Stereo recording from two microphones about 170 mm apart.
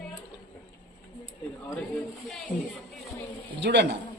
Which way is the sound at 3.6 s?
85° right.